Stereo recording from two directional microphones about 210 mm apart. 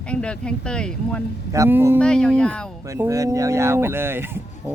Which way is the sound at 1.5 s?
10° right (ahead or behind).